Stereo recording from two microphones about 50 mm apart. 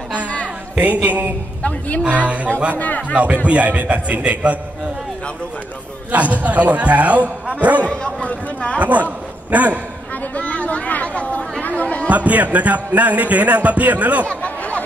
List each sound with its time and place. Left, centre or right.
0.7 s a man's voice: right
2.8 s a man's voice: left
3.4 s a man's voice: right
6.1 s a man's voice: right
8.0 s speech: left
8.7 s speech: right
10.3 s chatter: left
12.1 s speech: right
14.2 s chatter: left